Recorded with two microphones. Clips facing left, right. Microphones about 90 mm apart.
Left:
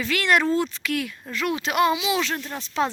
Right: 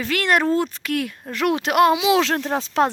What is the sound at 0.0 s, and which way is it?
Speech, 50° right (ahead or behind).